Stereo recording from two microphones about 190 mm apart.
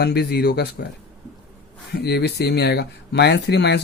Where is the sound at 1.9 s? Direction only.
60° left (ahead or behind).